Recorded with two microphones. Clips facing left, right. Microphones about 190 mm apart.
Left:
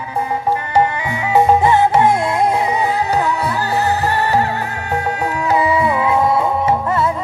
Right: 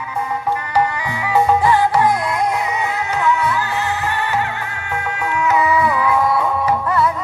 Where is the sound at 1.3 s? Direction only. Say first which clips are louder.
Left 2 dB; 25° left (ahead or behind).